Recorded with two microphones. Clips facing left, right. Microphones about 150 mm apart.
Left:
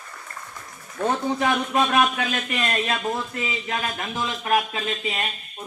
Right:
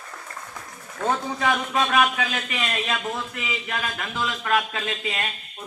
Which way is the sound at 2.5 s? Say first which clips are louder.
Left 3 dB; 45° left (ahead or behind).